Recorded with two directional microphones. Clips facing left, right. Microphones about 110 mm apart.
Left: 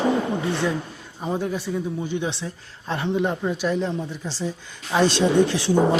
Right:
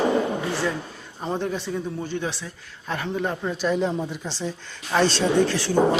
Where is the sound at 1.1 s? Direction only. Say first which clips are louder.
Left 1 dB; 5° left (ahead or behind).